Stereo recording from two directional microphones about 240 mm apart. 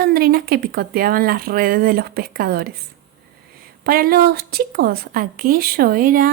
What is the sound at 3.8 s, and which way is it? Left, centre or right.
A woman's voice, right.